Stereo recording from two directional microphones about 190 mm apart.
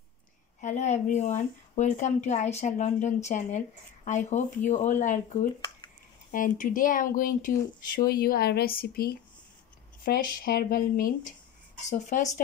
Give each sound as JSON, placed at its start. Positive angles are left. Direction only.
{"t": 0.6, "sound": "speech", "side_deg": 40}